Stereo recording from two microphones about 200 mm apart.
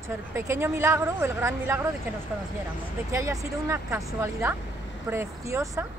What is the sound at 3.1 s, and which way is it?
Speech, 15° right (ahead or behind).